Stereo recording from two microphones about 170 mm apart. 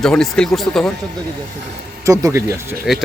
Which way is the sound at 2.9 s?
Centre (ahead or behind).